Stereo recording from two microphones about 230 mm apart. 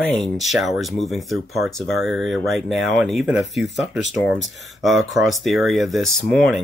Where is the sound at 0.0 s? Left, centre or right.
Centre.